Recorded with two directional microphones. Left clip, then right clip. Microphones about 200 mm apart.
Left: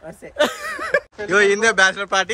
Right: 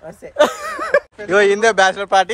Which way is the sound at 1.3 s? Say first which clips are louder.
Right 2 dB; centre (ahead or behind).